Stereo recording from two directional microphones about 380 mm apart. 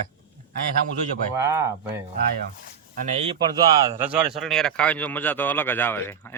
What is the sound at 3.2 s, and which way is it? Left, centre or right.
Speech, centre.